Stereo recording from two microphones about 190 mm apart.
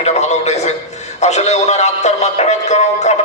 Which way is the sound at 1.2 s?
35° left (ahead or behind).